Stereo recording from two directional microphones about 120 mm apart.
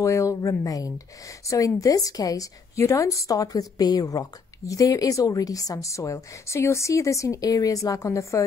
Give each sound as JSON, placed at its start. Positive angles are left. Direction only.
{"t": 0.0, "sound": "a woman's voice", "side_deg": 25}